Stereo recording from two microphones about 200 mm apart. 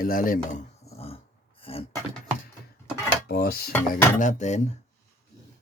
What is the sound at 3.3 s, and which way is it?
Speech, 50° left (ahead or behind).